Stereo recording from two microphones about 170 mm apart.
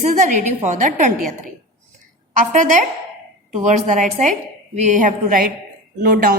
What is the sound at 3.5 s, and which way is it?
A woman's voice, 45° right (ahead or behind).